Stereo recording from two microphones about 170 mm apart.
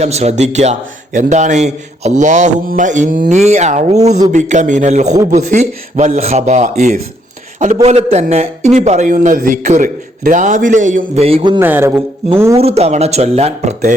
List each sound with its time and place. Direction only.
0.0 s a man's voice: 40° right (ahead or behind)
11.6 s speech: 15° right (ahead or behind)
12.5 s speech: 35° right (ahead or behind)